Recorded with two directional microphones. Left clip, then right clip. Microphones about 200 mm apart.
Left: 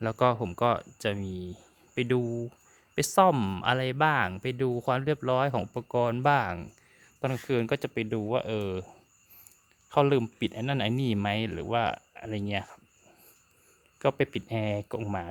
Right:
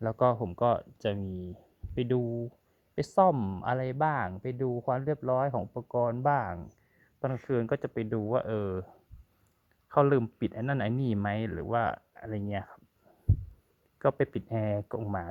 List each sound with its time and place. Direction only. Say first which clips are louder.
0.0 s speech: left 1 dB; 15° left (ahead or behind); by 6.7 s 40° left (ahead or behind)
7.2 s speech: left 2 dB; 25° left (ahead or behind)
14.0 s speech: left 1 dB; 15° left (ahead or behind)